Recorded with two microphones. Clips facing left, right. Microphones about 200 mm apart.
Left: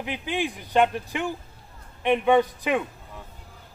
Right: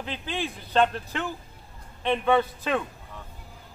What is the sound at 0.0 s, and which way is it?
A man's voice, 15° left (ahead or behind).